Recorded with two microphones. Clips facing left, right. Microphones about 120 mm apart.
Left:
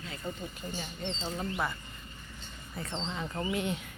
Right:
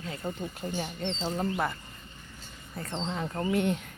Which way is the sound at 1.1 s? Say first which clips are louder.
Right 5 dB; 45° right (ahead or behind).